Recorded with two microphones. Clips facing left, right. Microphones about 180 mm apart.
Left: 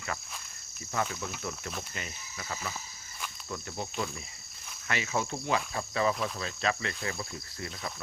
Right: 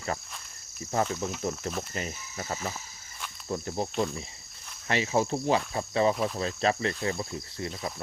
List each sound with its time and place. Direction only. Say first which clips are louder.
0.9 s speech: right 5 dB; 35° right (ahead or behind)